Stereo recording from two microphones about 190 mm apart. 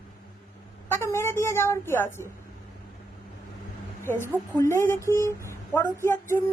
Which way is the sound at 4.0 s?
10° left (ahead or behind).